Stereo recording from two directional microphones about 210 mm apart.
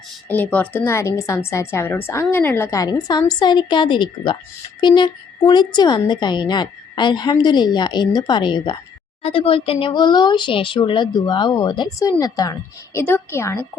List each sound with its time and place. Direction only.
0.3 s a woman's voice: 10° left (ahead or behind)